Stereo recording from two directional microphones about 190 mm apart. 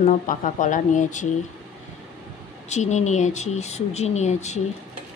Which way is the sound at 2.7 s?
40° left (ahead or behind).